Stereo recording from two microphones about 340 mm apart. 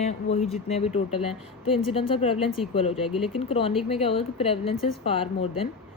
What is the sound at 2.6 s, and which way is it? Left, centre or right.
Speech, centre.